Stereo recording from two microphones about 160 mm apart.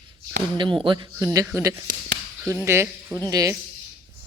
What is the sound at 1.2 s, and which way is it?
Speech, 20° right (ahead or behind).